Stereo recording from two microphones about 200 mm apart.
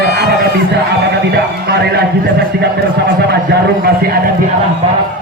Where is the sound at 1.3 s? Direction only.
55° right (ahead or behind).